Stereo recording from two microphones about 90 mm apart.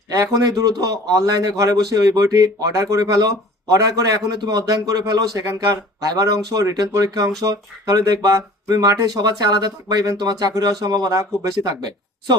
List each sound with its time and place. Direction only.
0.1 s a man's voice: 40° right (ahead or behind)